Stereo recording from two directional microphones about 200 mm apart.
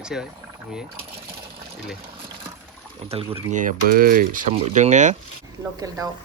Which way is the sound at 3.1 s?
30° right (ahead or behind).